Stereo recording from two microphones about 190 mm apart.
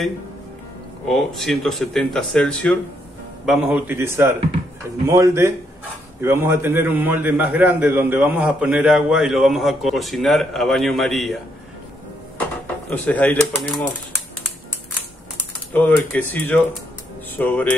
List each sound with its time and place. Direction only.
1.0 s a man's voice: centre (ahead or behind)
3.4 s a man's voice: 5° right (ahead or behind)
12.9 s speech: 10° left (ahead or behind)
15.7 s speech: 10° left (ahead or behind)